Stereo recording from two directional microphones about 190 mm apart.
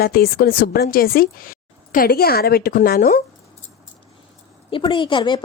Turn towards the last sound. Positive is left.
turn(degrees=25)  # may be behind; listen again after turning